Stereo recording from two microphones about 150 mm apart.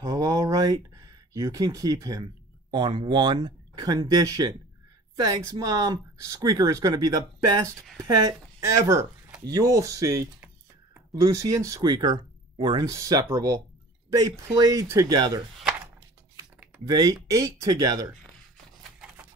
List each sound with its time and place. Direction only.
0.0 s speech: 25° right (ahead or behind)
8.3 s speech: 20° right (ahead or behind)
16.8 s speech: 25° right (ahead or behind)